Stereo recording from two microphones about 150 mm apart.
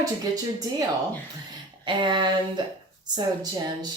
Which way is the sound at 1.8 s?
30° right (ahead or behind).